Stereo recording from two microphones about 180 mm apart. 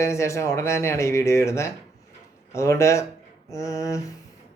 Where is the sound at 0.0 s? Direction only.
15° left (ahead or behind).